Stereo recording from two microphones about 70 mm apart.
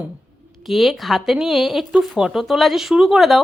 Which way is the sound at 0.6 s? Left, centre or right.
Centre.